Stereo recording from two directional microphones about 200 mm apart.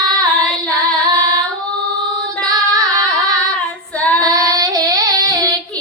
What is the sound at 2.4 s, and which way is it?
Female singing, 20° right (ahead or behind).